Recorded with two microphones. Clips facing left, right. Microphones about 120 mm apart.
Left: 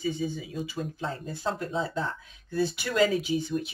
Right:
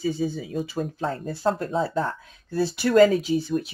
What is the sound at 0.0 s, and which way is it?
Speech, 35° right (ahead or behind).